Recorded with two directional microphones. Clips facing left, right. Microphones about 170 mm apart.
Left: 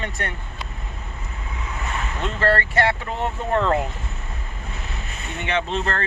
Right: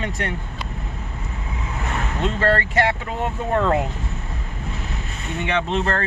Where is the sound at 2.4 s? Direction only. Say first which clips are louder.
Even; 15° right (ahead or behind).